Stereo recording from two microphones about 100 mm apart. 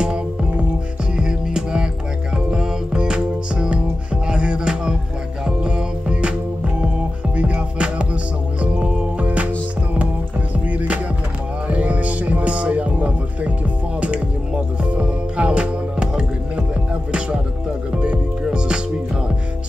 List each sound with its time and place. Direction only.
0.0 s music: 10° right (ahead or behind)
7.3 s music: 10° right (ahead or behind)
10.7 s music: 15° right (ahead or behind)
17.9 s music: 10° right (ahead or behind)